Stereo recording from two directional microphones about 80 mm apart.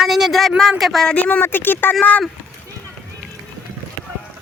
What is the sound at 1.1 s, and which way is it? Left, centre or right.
Speech, left.